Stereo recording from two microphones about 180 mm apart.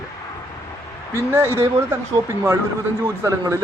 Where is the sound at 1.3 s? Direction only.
15° right (ahead or behind).